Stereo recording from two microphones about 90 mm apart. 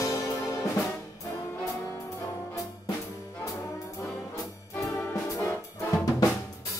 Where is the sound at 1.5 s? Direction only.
30° left (ahead or behind).